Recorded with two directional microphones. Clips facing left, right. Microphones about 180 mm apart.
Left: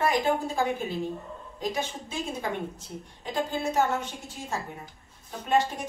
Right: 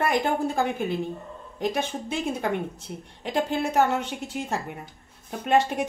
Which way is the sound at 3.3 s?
70° right (ahead or behind).